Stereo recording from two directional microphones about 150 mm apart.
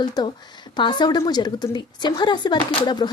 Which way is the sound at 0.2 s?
25° left (ahead or behind).